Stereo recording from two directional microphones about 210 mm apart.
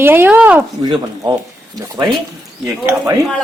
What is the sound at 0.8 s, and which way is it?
Speech, 20° right (ahead or behind).